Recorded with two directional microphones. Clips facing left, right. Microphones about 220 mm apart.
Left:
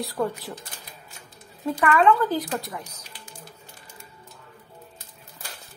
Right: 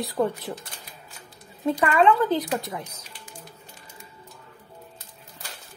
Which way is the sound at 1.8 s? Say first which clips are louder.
Even; 25° right (ahead or behind).